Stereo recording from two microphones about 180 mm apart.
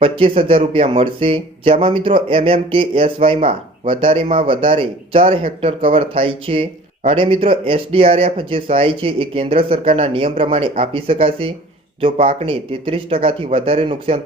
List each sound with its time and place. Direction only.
0.0 s speech: 30° right (ahead or behind)